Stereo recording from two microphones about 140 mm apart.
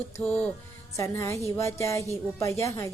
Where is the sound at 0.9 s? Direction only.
20° left (ahead or behind).